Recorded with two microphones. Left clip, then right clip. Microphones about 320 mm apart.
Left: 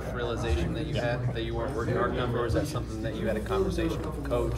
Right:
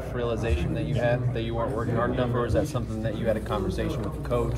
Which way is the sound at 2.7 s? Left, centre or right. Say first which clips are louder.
Right 3 dB; right.